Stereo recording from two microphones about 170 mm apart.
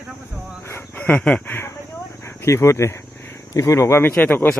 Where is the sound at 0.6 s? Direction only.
10° left (ahead or behind).